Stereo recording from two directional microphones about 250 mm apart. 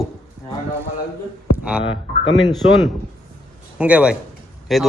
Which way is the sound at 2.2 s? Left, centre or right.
Centre.